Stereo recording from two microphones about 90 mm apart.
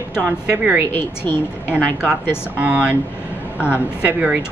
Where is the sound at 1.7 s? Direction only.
15° right (ahead or behind).